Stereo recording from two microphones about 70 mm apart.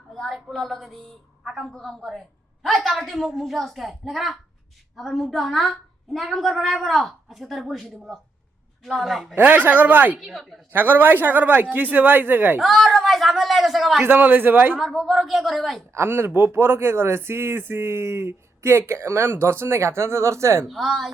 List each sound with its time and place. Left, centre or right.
0.1 s a sound: centre
0.3 s a woman's voice: centre
9.4 s speech: right
10.2 s a woman's voice: centre
10.7 s speech: right
12.5 s a woman's voice: centre
14.0 s speech: right
14.8 s a woman's voice: centre
16.0 s speech: right
20.7 s a woman's voice: centre